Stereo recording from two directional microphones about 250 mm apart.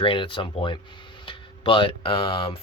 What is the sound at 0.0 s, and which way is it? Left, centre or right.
Speech, centre.